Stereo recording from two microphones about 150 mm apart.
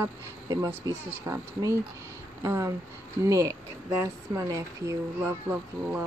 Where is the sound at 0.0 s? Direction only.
20° right (ahead or behind).